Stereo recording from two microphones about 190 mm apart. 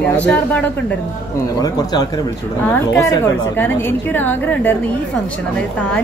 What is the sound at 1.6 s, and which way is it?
A woman's voice, 20° left (ahead or behind).